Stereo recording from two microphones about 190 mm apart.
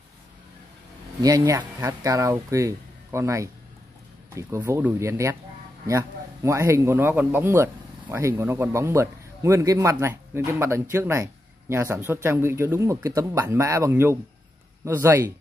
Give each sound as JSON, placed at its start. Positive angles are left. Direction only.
{"t": 1.2, "sound": "a man's voice", "side_deg": -20}